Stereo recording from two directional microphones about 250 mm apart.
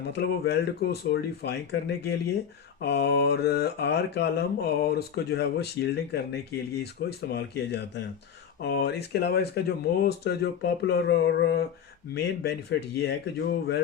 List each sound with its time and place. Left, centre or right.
0.1 s mantra: left
2.8 s mantra: left